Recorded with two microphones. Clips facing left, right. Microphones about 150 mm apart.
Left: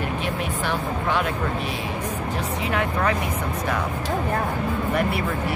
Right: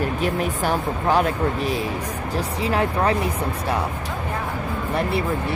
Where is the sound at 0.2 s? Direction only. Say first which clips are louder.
Right 4 dB; 40° right (ahead or behind).